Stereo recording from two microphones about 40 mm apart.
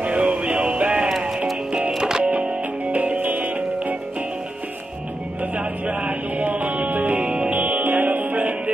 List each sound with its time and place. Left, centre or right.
0.0 s music: right
2.2 s music: right
5.4 s music: right
6.3 s music: right
7.2 s music: right